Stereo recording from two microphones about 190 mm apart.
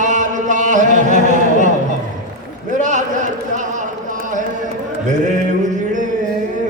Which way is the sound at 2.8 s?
40° right (ahead or behind).